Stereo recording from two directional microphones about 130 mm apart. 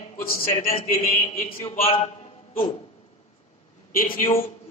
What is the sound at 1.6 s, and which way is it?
Speech, 50° left (ahead or behind).